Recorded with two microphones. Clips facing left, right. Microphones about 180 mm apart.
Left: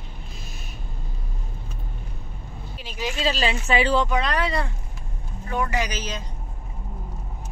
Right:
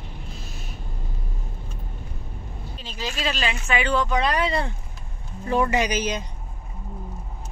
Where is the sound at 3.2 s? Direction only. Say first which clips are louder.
Left 3 dB; 30° left (ahead or behind).